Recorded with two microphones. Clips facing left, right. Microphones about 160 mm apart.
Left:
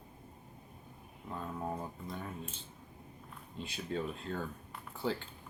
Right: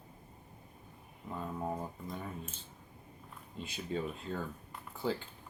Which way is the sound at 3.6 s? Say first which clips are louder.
Even; centre (ahead or behind).